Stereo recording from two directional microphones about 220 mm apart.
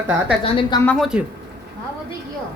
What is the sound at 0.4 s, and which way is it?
Speech, 25° left (ahead or behind).